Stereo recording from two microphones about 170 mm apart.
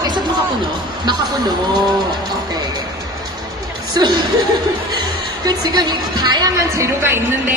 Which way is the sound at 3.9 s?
25° right (ahead or behind).